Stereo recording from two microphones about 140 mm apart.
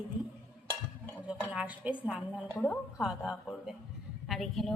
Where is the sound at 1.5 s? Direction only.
10° right (ahead or behind).